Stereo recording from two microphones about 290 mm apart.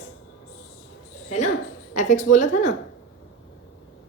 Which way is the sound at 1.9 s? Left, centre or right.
Left.